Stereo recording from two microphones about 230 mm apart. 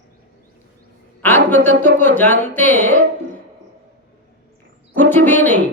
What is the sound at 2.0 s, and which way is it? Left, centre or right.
Speech, centre.